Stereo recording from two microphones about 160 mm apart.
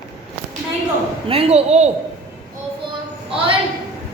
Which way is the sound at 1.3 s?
40° right (ahead or behind).